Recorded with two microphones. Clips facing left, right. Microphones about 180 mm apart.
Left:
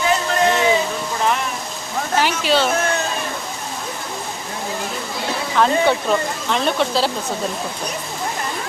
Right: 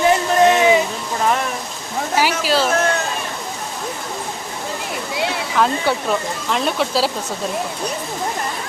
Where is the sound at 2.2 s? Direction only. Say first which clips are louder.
Even; 5° right (ahead or behind).